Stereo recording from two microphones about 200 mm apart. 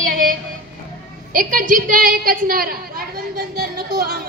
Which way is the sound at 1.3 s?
40° right (ahead or behind).